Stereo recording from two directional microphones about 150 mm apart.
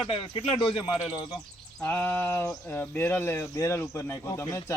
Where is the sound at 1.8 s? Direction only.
10° left (ahead or behind).